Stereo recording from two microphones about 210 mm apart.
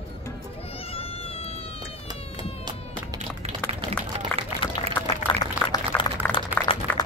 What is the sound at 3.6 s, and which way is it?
Run, 30° right (ahead or behind).